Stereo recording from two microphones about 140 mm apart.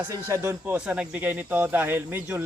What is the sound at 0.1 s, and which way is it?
Speech, 20° right (ahead or behind).